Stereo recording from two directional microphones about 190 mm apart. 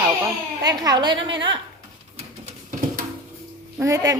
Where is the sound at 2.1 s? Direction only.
40° right (ahead or behind).